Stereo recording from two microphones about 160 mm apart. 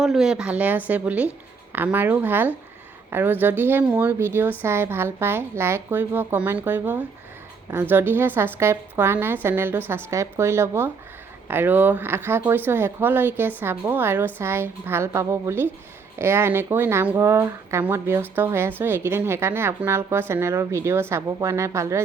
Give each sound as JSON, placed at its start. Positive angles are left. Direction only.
{"t": 0.0, "sound": "a woman's voice", "side_deg": -5}